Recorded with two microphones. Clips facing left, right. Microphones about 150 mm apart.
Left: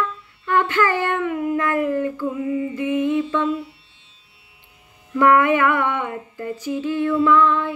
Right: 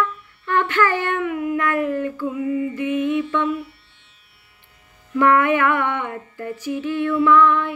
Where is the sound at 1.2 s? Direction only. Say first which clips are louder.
Even; 30° left (ahead or behind).